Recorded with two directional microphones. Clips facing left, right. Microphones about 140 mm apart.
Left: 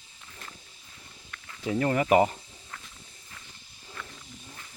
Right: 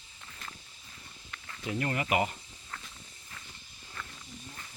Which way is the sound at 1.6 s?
35° left (ahead or behind).